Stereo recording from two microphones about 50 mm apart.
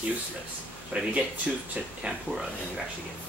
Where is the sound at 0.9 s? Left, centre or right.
Centre.